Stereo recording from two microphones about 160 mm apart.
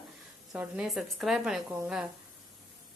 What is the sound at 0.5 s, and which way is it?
Speech, 10° right (ahead or behind).